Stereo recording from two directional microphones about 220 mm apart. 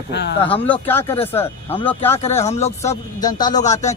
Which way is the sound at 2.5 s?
30° left (ahead or behind).